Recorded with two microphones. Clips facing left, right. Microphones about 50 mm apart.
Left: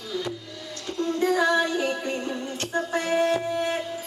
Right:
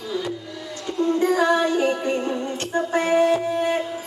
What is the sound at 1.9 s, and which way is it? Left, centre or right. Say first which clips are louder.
Music: right 5 dB; centre.